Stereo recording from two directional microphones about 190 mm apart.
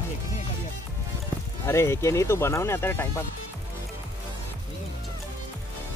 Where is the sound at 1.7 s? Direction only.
15° left (ahead or behind).